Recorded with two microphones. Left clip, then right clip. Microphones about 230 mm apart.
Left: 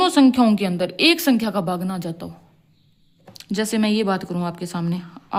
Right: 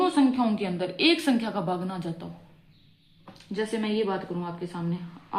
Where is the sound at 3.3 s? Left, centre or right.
Left.